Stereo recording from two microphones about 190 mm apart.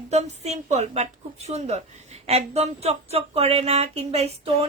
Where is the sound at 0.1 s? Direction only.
35° right (ahead or behind).